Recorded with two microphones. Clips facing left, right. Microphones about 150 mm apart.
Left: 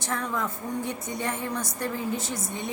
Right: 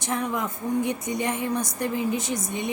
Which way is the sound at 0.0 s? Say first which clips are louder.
Right 3 dB; 15° right (ahead or behind).